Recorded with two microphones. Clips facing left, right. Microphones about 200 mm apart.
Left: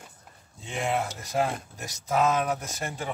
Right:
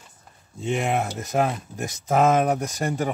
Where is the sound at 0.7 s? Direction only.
65° right (ahead or behind).